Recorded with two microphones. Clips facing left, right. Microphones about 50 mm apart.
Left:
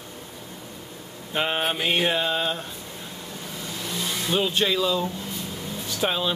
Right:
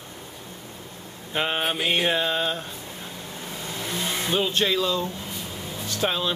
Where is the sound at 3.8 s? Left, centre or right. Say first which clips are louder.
Right 2 dB; right.